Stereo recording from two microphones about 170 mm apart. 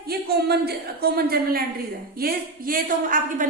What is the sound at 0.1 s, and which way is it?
A woman's voice, 65° right (ahead or behind).